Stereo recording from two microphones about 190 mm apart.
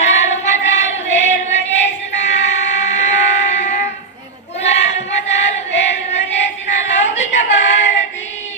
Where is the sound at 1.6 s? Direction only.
65° left (ahead or behind).